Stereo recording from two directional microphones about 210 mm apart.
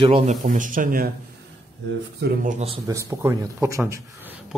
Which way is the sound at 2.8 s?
15° right (ahead or behind).